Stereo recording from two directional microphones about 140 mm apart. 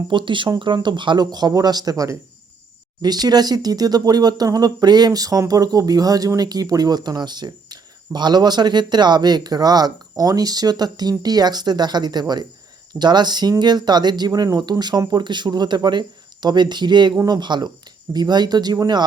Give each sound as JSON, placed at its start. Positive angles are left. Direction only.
{"t": 0.1, "sound": "speech", "side_deg": -35}